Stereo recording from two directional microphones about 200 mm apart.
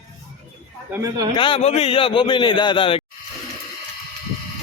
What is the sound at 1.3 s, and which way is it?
A man's voice, 25° left (ahead or behind).